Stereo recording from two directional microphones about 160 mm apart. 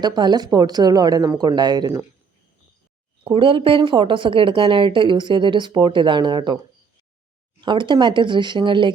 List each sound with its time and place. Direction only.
0.0 s speech: 25° right (ahead or behind)
3.2 s a woman's voice: 35° right (ahead or behind)
7.6 s speech: 30° right (ahead or behind)